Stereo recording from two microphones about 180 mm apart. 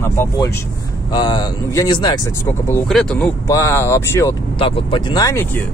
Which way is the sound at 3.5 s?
15° left (ahead or behind).